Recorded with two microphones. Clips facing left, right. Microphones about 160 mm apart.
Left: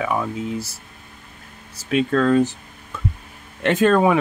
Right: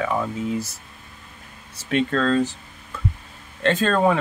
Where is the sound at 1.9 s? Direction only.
5° left (ahead or behind).